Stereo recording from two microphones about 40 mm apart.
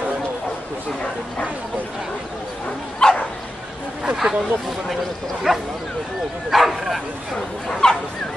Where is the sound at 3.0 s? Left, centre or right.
Left.